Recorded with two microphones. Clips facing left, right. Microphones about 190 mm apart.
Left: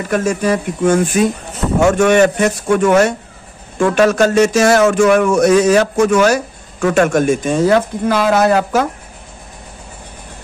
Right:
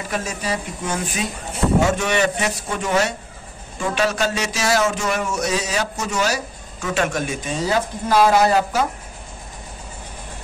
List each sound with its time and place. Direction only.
0.1 s speech: 50° left (ahead or behind)